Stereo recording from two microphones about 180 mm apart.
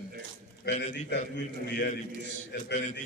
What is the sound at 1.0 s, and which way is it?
Speech, 70° left (ahead or behind).